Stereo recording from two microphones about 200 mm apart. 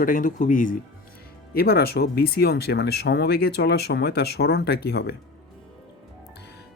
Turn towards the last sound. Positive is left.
turn(degrees=55)  # may be behind; listen again after turning